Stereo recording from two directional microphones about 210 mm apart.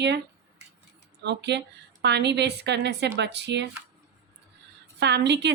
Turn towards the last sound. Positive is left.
turn(degrees=-55)  # may be behind; listen again after turning